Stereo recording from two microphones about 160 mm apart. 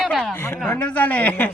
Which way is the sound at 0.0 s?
Centre (ahead or behind).